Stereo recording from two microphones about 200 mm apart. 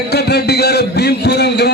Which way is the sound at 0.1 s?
55° left (ahead or behind).